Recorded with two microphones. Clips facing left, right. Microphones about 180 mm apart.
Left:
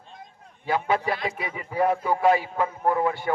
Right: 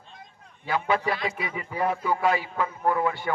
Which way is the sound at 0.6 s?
45° left (ahead or behind).